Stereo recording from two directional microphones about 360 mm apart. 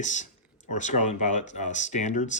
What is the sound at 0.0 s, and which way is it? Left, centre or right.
Speech, centre.